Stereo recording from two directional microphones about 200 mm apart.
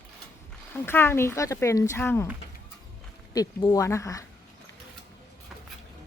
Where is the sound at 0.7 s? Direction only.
10° left (ahead or behind).